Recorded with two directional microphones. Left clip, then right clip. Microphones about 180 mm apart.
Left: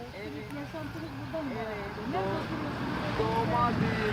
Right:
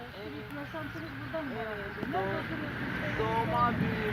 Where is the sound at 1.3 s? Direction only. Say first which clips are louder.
Left 1 dB; 45° left (ahead or behind).